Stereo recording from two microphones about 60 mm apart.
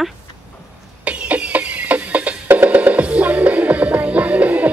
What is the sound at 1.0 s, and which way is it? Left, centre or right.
Music, right.